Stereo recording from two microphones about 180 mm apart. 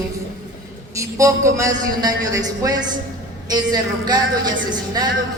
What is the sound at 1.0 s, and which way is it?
A man's voice, 15° right (ahead or behind).